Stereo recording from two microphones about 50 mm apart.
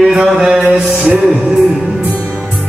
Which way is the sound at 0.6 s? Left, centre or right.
Right.